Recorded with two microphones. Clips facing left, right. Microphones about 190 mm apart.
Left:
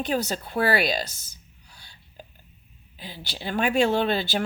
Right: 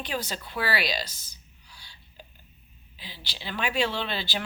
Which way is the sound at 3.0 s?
50° left (ahead or behind).